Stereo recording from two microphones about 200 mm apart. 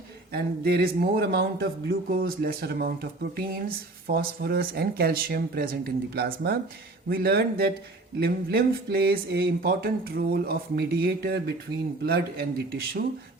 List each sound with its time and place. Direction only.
0.3 s speech: 50° right (ahead or behind)